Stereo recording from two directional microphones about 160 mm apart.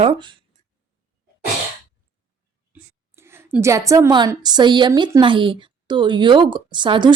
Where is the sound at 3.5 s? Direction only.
20° right (ahead or behind).